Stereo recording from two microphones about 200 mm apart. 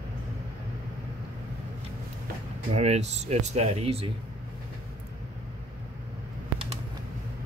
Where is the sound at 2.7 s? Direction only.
35° right (ahead or behind).